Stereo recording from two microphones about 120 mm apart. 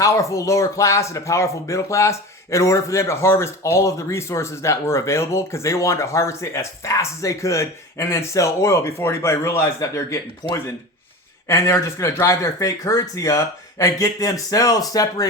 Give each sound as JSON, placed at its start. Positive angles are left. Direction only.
{"t": 0.0, "sound": "speech", "side_deg": 25}